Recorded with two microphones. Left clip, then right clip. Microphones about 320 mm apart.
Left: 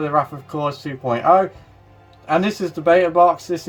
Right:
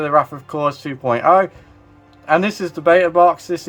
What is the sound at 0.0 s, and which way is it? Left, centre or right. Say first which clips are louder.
Speech: right 4 dB; centre.